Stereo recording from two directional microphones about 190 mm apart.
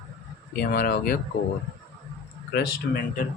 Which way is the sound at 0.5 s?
55° left (ahead or behind).